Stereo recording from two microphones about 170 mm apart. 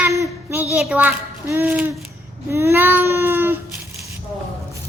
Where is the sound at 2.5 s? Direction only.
15° right (ahead or behind).